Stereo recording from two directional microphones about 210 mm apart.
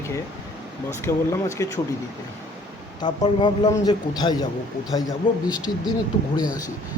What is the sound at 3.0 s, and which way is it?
A man's voice, 20° left (ahead or behind).